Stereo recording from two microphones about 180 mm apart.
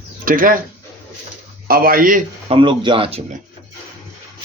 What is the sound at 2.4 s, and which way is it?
Speech, 30° right (ahead or behind).